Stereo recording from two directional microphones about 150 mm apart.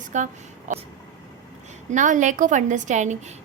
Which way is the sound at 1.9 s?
55° right (ahead or behind).